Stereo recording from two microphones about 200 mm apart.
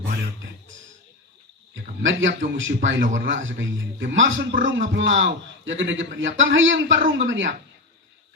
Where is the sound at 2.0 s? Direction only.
70° right (ahead or behind).